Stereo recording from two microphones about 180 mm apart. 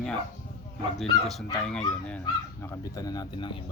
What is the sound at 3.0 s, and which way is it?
Speech, 20° left (ahead or behind).